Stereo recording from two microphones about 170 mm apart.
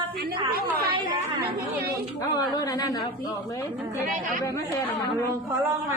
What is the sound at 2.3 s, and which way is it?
Speech, 25° left (ahead or behind).